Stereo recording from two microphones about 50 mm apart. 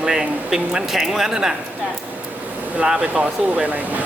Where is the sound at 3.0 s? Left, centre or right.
Right.